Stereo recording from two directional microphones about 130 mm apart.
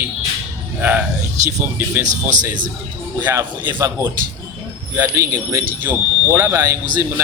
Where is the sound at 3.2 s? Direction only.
20° right (ahead or behind).